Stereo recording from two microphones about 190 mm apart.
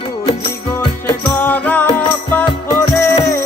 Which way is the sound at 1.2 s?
10° left (ahead or behind).